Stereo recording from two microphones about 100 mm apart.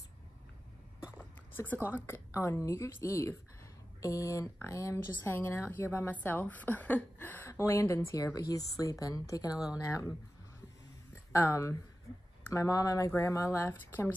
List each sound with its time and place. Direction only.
1.1 s a sound: 20° left (ahead or behind)
1.9 s a woman's voice: 25° left (ahead or behind)
11.3 s speech: 30° left (ahead or behind)